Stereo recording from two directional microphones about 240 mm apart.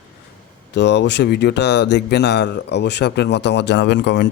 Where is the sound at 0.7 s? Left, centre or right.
Left.